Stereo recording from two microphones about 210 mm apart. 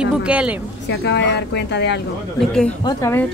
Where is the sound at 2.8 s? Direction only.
15° left (ahead or behind).